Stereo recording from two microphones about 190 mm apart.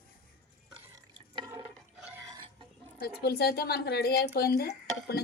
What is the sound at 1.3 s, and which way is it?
Drip, 25° right (ahead or behind).